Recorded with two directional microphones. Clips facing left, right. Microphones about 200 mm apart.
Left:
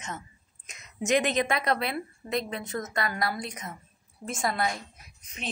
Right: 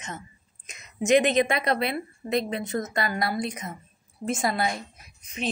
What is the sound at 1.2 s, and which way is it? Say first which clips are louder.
A woman's voice: right 4 dB; 20° right (ahead or behind).